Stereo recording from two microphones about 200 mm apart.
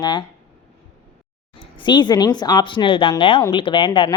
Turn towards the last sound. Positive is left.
turn(degrees=25)  # may be behind; listen again after turning